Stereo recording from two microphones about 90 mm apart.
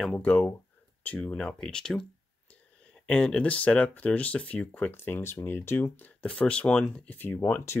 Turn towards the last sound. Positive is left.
turn(degrees=25)  # may be behind; listen again after turning